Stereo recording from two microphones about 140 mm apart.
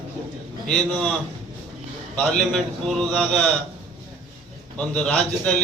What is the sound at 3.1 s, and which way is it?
Speech, 5° left (ahead or behind).